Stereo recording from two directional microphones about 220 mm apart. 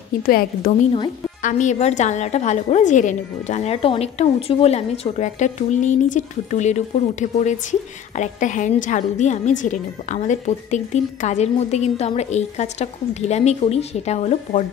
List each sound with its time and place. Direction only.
0.2 s a woman's voice: 40° left (ahead or behind)